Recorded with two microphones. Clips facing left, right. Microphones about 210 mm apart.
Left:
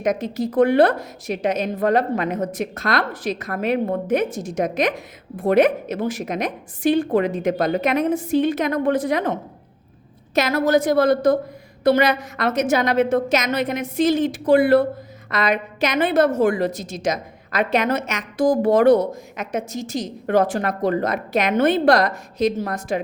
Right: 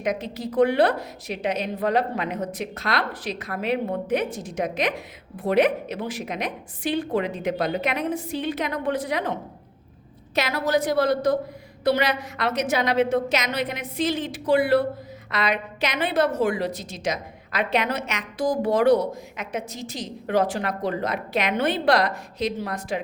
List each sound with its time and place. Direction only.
0.0 s a woman's voice: 45° left (ahead or behind)